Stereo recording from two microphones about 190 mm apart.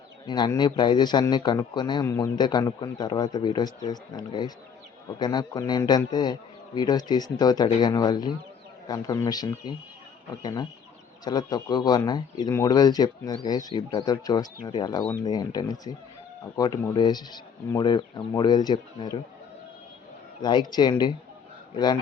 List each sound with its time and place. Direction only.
0.3 s speech: 20° left (ahead or behind)
20.4 s speech: 25° left (ahead or behind)